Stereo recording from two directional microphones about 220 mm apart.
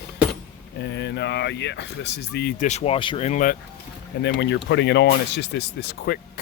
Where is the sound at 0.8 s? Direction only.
50° left (ahead or behind).